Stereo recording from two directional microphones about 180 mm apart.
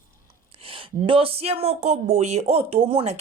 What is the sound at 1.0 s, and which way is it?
A woman's voice, 30° right (ahead or behind).